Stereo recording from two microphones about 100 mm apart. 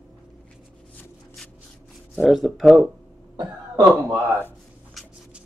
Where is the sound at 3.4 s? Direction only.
45° right (ahead or behind).